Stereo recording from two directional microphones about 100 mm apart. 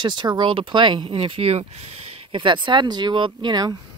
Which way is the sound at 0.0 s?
50° right (ahead or behind).